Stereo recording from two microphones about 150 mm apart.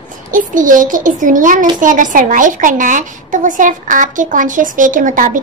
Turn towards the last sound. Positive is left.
turn(degrees=-60)  # may be behind; listen again after turning